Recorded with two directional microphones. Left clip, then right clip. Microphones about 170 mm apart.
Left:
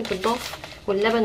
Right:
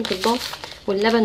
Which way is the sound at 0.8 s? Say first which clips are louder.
Right 2 dB; 25° right (ahead or behind).